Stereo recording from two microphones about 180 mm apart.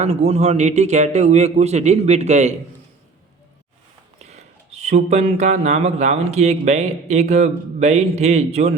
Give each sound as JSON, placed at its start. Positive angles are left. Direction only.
{"t": 0.0, "sound": "speech", "side_deg": -35}
{"t": 4.2, "sound": "speech", "side_deg": -40}